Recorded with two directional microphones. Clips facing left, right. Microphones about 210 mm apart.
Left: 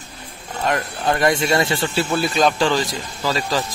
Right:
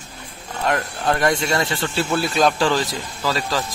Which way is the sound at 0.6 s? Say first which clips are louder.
Even; centre (ahead or behind).